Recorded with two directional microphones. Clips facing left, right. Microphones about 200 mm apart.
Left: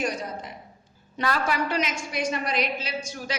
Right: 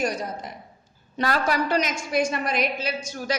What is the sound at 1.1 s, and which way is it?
A woman's voice, 35° right (ahead or behind).